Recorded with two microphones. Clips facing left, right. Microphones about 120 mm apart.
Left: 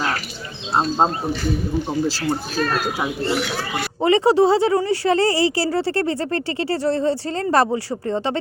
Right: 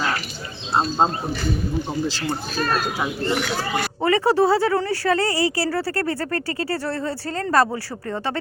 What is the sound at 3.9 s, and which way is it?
Speech, 15° left (ahead or behind).